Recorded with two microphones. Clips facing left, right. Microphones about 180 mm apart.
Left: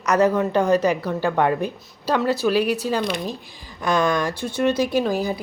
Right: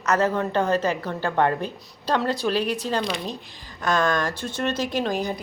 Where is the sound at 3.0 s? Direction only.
50° left (ahead or behind).